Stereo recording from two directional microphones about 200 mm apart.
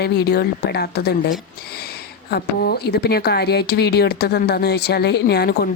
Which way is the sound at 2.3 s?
50° left (ahead or behind).